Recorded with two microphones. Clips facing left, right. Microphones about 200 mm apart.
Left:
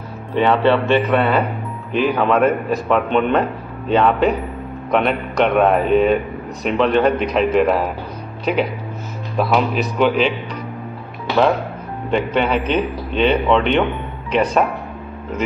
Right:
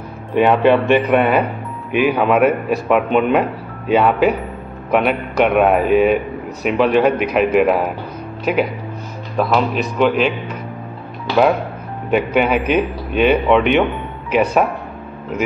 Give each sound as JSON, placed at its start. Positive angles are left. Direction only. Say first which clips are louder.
{"t": 0.3, "sound": "a man's voice", "louder": "right 2 dB", "side_deg": -10}
{"t": 12.1, "sound": "a man's voice", "louder": "right 2 dB", "side_deg": -10}